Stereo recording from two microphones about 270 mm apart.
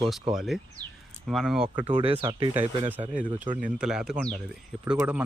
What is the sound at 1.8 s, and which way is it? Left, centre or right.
Speech, centre.